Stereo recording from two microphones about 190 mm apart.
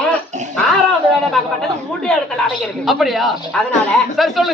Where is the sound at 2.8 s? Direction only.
Centre (ahead or behind).